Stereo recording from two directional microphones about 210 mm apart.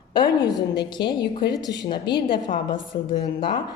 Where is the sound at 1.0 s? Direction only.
55° left (ahead or behind).